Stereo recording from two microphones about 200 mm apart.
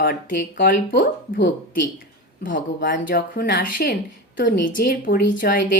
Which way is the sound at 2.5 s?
45° left (ahead or behind).